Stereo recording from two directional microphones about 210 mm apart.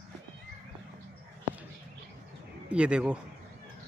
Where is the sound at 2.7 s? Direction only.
5° right (ahead or behind).